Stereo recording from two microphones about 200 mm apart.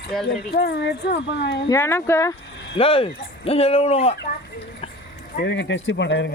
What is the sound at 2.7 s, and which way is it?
Speech, 30° left (ahead or behind).